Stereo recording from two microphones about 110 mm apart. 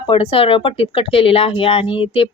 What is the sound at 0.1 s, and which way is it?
Speech, 55° left (ahead or behind).